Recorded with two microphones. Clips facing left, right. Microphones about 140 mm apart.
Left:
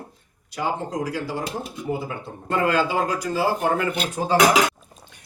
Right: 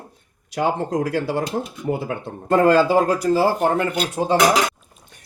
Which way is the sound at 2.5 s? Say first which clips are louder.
Right 7 dB; 40° right (ahead or behind).